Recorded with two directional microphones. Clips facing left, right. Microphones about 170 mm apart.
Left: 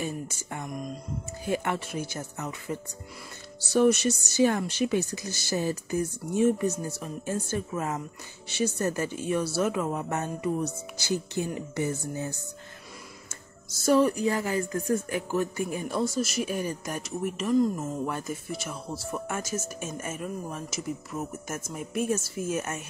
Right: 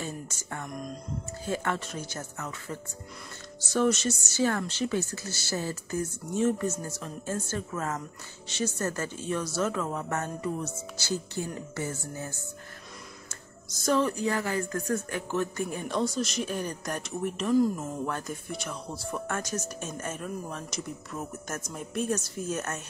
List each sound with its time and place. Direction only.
0.0 s speech: 15° left (ahead or behind)
0.7 s speech: centre (ahead or behind)
1.4 s speech: 15° left (ahead or behind)
13.8 s speech: 10° left (ahead or behind)